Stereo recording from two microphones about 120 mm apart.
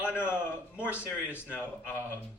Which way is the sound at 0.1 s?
15° left (ahead or behind).